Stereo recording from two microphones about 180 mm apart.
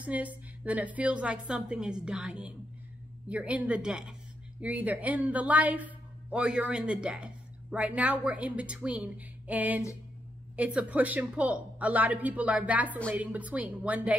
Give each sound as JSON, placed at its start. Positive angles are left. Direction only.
{"t": 0.0, "sound": "a woman's voice", "side_deg": -10}